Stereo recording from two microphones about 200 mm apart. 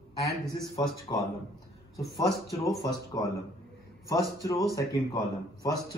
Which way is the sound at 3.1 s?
20° left (ahead or behind).